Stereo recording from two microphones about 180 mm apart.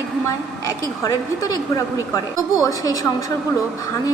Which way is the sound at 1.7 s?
20° left (ahead or behind).